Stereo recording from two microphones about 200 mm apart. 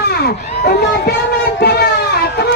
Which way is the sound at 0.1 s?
55° left (ahead or behind).